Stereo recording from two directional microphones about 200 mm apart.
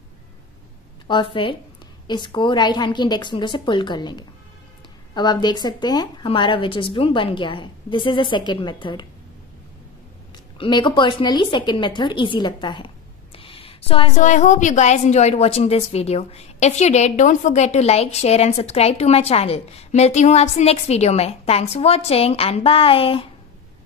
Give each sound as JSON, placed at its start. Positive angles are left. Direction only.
{"t": 1.0, "sound": "a woman's voice", "side_deg": 25}
{"t": 10.6, "sound": "a woman's voice", "side_deg": 25}
{"t": 13.4, "sound": "a sound", "side_deg": 30}
{"t": 14.1, "sound": "a woman's voice", "side_deg": 40}